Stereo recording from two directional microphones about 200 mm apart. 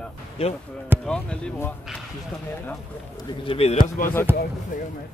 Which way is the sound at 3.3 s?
30° left (ahead or behind).